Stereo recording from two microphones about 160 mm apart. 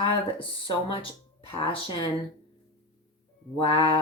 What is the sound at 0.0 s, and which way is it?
Speech, 30° left (ahead or behind).